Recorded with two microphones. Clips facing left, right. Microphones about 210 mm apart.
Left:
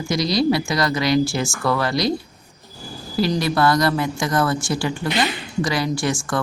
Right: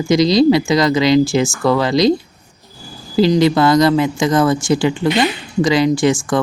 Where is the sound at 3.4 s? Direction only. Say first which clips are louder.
Right 7 dB; 20° right (ahead or behind).